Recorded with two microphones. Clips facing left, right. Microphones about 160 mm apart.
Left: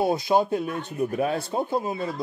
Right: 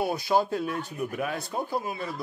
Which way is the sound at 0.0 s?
20° left (ahead or behind).